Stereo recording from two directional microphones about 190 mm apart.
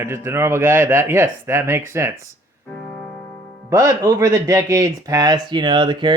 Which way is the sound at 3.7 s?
15° right (ahead or behind).